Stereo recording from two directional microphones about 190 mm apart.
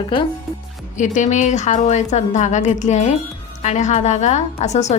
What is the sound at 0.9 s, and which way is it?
A woman's voice, 40° left (ahead or behind).